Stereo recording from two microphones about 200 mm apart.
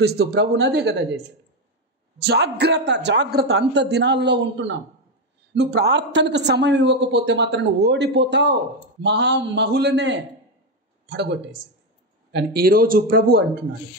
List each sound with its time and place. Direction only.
0.0 s speech: 55° right (ahead or behind)